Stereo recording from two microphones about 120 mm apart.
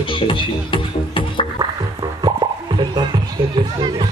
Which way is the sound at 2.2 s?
40° right (ahead or behind).